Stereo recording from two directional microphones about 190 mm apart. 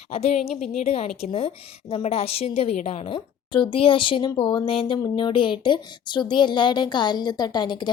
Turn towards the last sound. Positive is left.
turn(degrees=25)  # may be behind; listen again after turning